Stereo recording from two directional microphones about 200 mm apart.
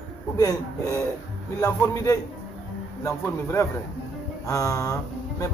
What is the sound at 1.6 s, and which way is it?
Speech, 15° left (ahead or behind).